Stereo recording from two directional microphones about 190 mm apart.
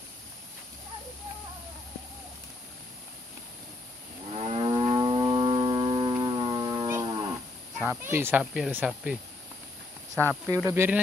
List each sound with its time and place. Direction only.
4.3 s livestock: 30° right (ahead or behind)
7.8 s speech: 10° right (ahead or behind)